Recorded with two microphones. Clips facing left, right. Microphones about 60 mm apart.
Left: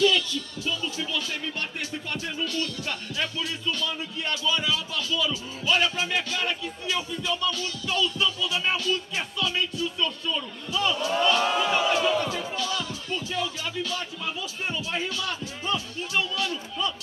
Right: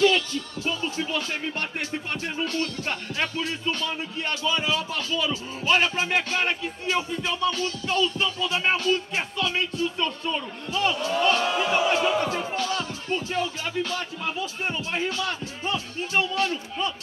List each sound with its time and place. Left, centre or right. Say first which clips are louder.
0.0 s speech: right 2 dB; right
11.5 s speech: right 1 dB; right